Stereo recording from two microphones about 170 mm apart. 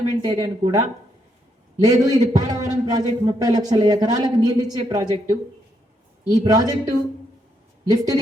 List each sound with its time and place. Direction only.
0.2 s speech: 25° right (ahead or behind)